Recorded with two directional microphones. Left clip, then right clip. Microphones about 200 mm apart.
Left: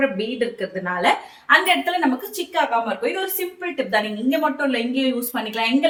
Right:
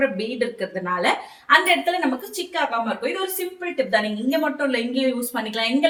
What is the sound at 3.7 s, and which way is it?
A woman's voice, 10° left (ahead or behind).